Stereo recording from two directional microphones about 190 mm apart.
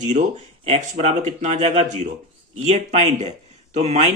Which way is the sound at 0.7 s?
35° right (ahead or behind).